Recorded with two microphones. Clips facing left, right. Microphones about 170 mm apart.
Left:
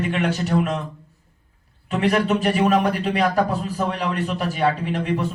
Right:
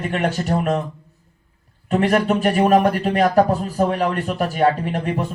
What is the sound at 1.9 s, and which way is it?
A man's voice, 50° right (ahead or behind).